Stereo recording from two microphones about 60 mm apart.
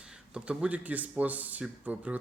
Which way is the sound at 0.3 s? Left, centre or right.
Centre.